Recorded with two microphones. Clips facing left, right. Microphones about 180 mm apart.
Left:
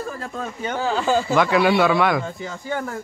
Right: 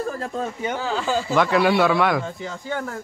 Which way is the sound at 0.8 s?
50° left (ahead or behind).